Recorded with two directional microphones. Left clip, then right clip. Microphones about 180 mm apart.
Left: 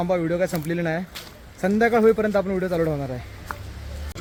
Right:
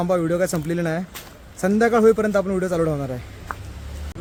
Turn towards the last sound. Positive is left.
turn(degrees=-5)  # may be behind; listen again after turning